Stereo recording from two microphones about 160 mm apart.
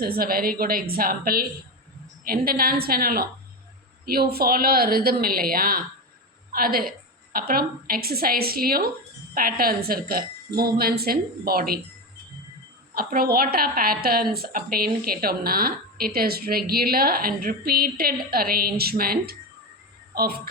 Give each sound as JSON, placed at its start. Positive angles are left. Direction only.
{"t": 0.0, "sound": "a woman's voice", "side_deg": -70}
{"t": 12.9, "sound": "a woman's voice", "side_deg": -65}